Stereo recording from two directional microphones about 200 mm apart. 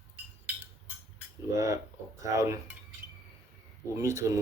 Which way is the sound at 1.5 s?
15° right (ahead or behind).